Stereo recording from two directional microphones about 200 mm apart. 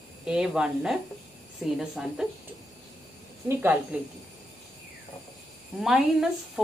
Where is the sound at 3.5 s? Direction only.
10° right (ahead or behind).